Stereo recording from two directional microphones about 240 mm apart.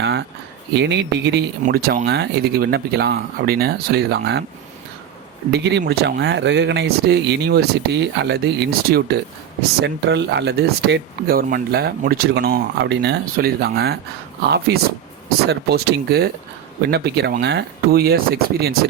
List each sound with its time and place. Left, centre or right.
0.0 s a sound: right
0.7 s speech: right
5.5 s speech: right